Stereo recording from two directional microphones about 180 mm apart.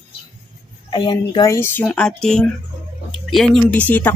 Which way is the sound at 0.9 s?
25° left (ahead or behind).